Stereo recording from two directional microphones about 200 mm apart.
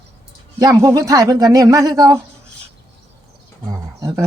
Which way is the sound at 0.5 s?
15° right (ahead or behind).